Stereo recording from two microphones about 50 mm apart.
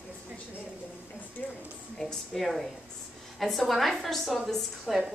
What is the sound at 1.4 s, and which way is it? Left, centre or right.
Speech, left.